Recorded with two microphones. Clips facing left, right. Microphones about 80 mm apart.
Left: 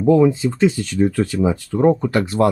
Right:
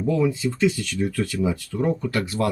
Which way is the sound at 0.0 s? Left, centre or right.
Left.